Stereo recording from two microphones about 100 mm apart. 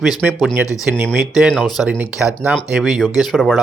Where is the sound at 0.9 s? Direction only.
15° right (ahead or behind).